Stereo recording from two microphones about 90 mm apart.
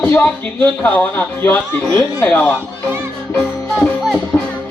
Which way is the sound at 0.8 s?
20° left (ahead or behind).